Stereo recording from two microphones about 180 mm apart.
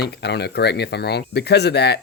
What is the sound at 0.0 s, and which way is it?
Speech, 65° left (ahead or behind).